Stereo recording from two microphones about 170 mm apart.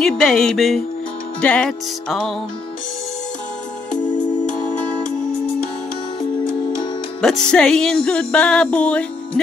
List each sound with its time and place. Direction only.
0.0 s music: 5° left (ahead or behind)
7.2 s music: 5° left (ahead or behind)